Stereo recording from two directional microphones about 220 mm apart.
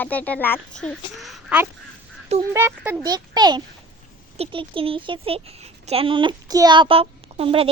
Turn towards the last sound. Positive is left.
turn(degrees=-25)  # may be behind; listen again after turning